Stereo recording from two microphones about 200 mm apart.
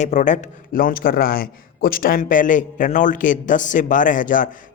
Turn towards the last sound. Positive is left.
turn(degrees=40)  # may be behind; listen again after turning